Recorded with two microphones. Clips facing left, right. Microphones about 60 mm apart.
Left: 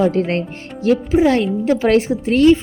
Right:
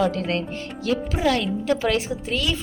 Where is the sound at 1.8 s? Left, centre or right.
Left.